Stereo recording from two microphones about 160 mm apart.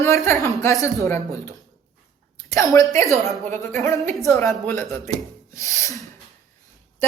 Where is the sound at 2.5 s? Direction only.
20° left (ahead or behind).